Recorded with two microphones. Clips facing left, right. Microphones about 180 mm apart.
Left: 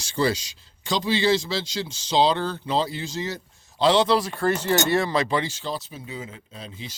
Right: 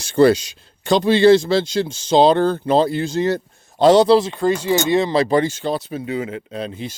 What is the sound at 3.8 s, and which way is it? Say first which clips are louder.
Speech: right 8 dB; 40° right (ahead or behind).